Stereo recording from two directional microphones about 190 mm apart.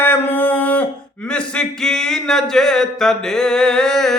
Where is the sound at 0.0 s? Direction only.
10° left (ahead or behind).